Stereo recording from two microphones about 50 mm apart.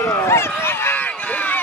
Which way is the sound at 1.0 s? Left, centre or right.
Left.